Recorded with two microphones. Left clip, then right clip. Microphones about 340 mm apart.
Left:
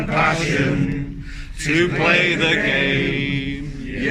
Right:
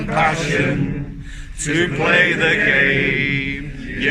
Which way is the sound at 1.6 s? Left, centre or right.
Centre.